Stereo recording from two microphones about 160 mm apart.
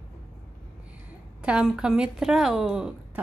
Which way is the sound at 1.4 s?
5° right (ahead or behind).